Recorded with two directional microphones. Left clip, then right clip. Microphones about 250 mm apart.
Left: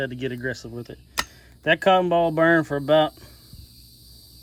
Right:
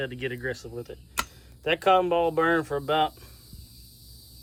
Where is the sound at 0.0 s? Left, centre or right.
Centre.